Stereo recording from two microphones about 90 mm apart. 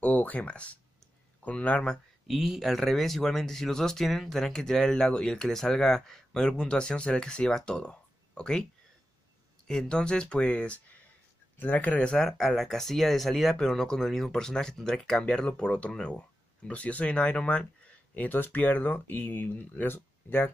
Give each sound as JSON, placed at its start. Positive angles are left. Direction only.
{"t": 0.0, "sound": "speech", "side_deg": 15}
{"t": 2.2, "sound": "speech", "side_deg": 0}
{"t": 9.7, "sound": "speech", "side_deg": 10}